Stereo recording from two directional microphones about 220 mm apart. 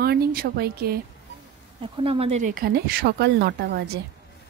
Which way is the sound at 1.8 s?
25° right (ahead or behind).